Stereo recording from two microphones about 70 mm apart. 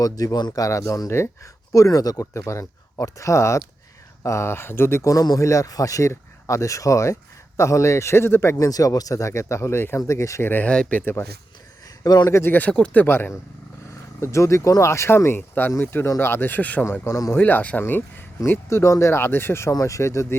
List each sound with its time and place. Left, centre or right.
0.0 s speech: left
2.3 s speech: left
5.4 s speech: left
8.5 s speech: left
10.4 s speech: left
12.0 s speech: left
12.3 s speech: left
13.1 s speech: left
14.2 s speech: left
15.4 s speech: left
17.1 s speech: left
17.3 s speech: left
19.7 s speech: left